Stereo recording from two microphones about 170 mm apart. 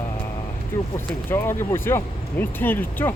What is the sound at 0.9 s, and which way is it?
Speech, 15° left (ahead or behind).